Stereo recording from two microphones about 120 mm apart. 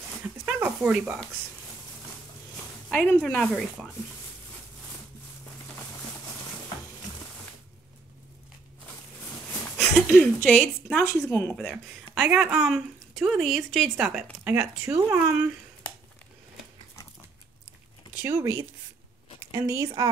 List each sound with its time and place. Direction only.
0.5 s a sound: 10° right (ahead or behind)
2.9 s speech: 10° left (ahead or behind)
9.9 s speech: 10° left (ahead or behind)
11.2 s speech: 15° left (ahead or behind)
11.5 s speech: centre (ahead or behind)
12.1 s speech: 10° right (ahead or behind)
13.9 s speech: 10° right (ahead or behind)
18.2 s a woman's voice: 20° right (ahead or behind)